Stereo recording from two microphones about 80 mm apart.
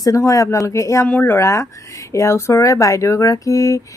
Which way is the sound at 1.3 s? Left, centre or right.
Left.